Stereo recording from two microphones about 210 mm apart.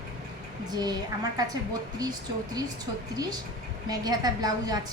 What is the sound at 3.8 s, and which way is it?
Speech, 20° right (ahead or behind).